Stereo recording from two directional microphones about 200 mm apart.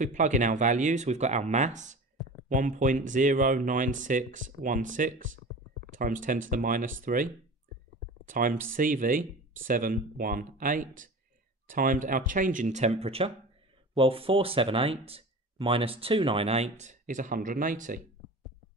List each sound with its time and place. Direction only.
0.0 s speech: 40° right (ahead or behind)
8.3 s speech: 40° right (ahead or behind)